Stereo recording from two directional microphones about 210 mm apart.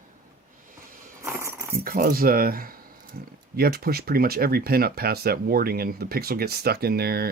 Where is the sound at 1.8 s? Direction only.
45° right (ahead or behind).